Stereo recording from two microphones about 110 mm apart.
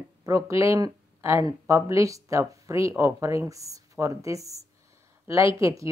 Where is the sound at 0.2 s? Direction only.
25° right (ahead or behind).